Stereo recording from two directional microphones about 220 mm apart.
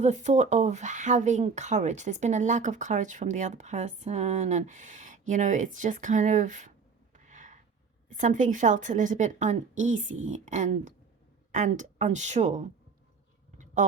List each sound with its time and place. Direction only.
0.0 s speech: 30° right (ahead or behind)
7.3 s a sound: 35° right (ahead or behind)
8.1 s speech: 35° right (ahead or behind)